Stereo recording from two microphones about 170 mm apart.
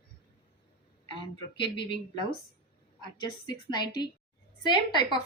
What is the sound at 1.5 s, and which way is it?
Speech, 30° left (ahead or behind).